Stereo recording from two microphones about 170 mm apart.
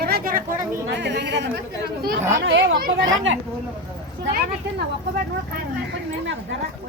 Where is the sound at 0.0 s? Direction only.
60° right (ahead or behind).